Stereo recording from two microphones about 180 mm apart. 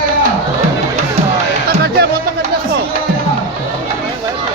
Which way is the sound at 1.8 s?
60° right (ahead or behind).